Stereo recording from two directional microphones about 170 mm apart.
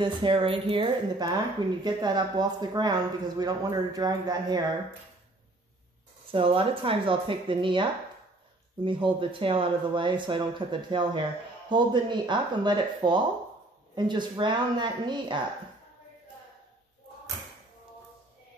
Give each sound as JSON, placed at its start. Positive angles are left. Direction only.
{"t": 0.0, "sound": "speech", "side_deg": -30}
{"t": 6.3, "sound": "speech", "side_deg": -30}